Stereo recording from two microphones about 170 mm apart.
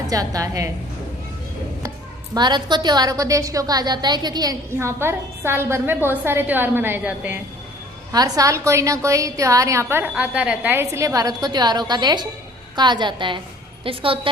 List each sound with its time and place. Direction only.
0.1 s a woman's voice: 20° right (ahead or behind)
2.3 s a woman's voice: 25° right (ahead or behind); by 7.3 s 10° right (ahead or behind)
8.1 s a woman's voice: 20° right (ahead or behind)